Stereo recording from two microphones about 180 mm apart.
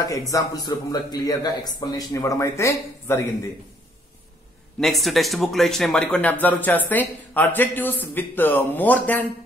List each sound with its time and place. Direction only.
0.3 s a man's voice: 20° left (ahead or behind)
4.7 s speech: centre (ahead or behind)